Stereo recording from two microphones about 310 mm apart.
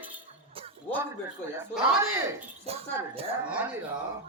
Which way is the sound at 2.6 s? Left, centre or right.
Centre.